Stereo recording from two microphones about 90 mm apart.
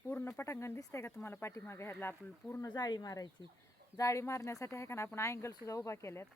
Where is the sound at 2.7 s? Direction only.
45° left (ahead or behind).